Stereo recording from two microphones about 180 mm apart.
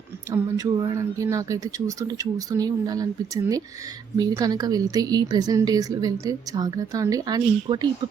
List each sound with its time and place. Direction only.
0.3 s a woman's voice: 15° right (ahead or behind)